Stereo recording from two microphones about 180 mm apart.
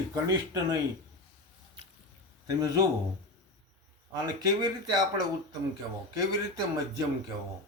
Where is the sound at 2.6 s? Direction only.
20° right (ahead or behind).